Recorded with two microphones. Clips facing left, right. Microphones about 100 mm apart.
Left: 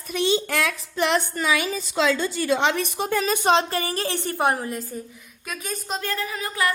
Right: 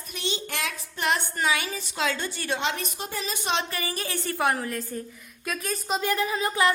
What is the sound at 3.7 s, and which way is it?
A woman's voice, 35° left (ahead or behind).